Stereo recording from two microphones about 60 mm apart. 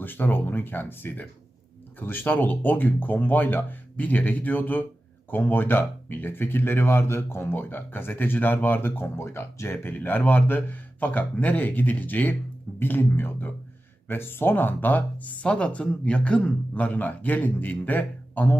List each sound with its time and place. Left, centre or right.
0.0 s speech: left